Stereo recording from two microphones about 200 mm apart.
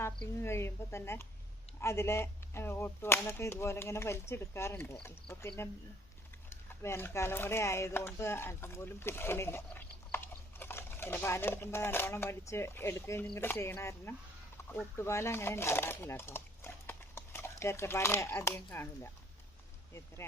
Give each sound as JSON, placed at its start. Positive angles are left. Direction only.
{"t": 0.0, "sound": "whip", "side_deg": 15}
{"t": 6.5, "sound": "whip", "side_deg": 10}
{"t": 14.7, "sound": "speech", "side_deg": 15}